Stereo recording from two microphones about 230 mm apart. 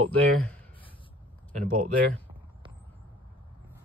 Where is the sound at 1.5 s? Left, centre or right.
Right.